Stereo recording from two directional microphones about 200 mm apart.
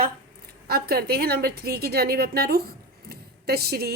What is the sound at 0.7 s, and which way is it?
A woman's voice, 50° right (ahead or behind).